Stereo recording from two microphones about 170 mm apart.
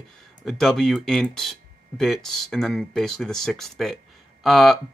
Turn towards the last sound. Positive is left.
turn(degrees=0)  # may be behind; listen again after turning